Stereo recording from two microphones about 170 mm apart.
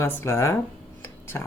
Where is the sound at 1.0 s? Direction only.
15° left (ahead or behind).